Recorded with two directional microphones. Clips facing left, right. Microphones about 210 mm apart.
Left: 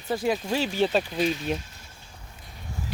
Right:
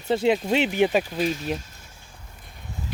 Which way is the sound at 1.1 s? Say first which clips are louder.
Even; 5° right (ahead or behind).